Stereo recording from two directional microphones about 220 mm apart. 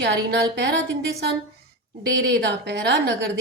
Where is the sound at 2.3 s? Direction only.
50° right (ahead or behind).